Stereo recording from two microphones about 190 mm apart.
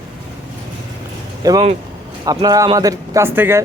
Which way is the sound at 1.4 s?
20° right (ahead or behind).